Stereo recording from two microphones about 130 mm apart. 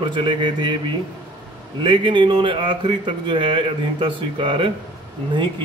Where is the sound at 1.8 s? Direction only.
40° right (ahead or behind).